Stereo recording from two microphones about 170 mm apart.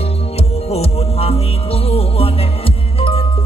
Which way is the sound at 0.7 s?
35° left (ahead or behind).